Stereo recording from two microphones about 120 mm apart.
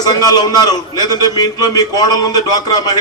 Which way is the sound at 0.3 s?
35° left (ahead or behind).